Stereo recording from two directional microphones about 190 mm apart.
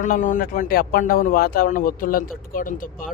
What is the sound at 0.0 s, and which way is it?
Speech, 45° left (ahead or behind).